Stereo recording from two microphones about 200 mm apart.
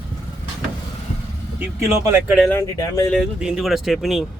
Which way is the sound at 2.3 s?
Centre (ahead or behind).